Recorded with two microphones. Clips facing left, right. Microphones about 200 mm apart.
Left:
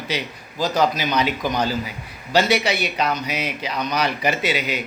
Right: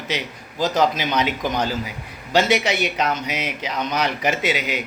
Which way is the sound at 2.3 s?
20° right (ahead or behind).